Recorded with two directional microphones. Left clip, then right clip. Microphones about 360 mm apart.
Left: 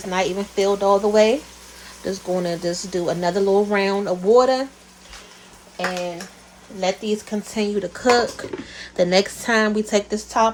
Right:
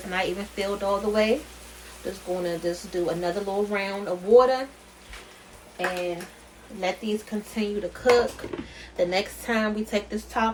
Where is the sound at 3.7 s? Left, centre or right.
Left.